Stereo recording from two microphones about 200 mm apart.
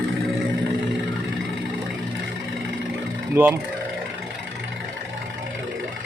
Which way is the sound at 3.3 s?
10° right (ahead or behind).